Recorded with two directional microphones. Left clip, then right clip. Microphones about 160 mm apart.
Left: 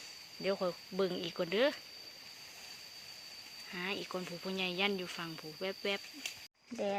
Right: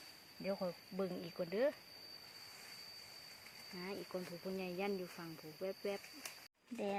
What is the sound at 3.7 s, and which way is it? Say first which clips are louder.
Speech: left 7 dB; 10° left (ahead or behind).